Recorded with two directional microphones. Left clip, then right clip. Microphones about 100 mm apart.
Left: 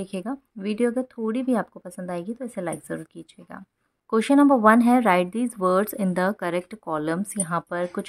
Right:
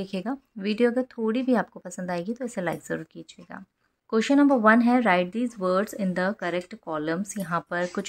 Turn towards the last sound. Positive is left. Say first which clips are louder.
# left 1 dB
turn(degrees=30)  # may be behind; listen again after turning